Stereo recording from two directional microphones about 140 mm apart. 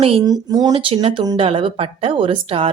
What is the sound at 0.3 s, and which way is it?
Speech, 30° right (ahead or behind).